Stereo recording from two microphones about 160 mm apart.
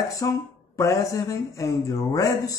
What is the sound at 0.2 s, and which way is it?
Speech, 25° left (ahead or behind).